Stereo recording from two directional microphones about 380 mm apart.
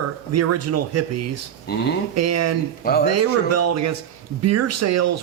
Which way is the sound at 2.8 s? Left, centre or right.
Left.